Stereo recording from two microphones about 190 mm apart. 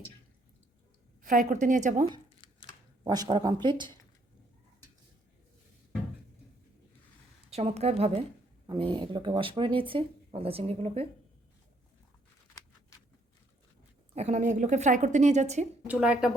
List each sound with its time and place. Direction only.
1.2 s a woman's voice: 45° right (ahead or behind)
3.0 s speech: 20° right (ahead or behind)
7.5 s speech: 35° right (ahead or behind)
14.2 s speech: 35° right (ahead or behind)
15.9 s speech: 5° right (ahead or behind)